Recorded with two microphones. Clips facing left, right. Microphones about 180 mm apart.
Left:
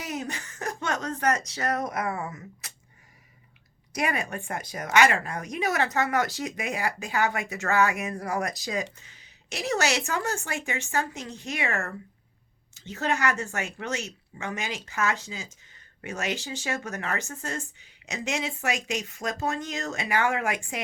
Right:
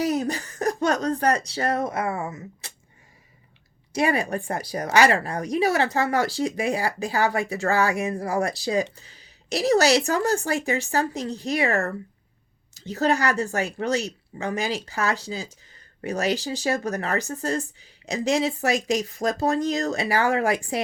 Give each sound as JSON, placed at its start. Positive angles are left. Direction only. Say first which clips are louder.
{"t": 0.0, "sound": "speech", "louder": "right 10 dB", "side_deg": -35}
{"t": 3.9, "sound": "speech", "louder": "right 6 dB", "side_deg": -30}